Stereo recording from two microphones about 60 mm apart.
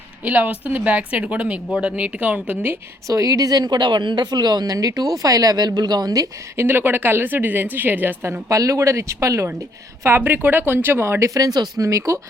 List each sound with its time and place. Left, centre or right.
0.3 s speech: right
3.1 s a woman's voice: right
6.6 s speech: right
8.4 s speech: right
10.0 s speech: right
11.3 s speech: right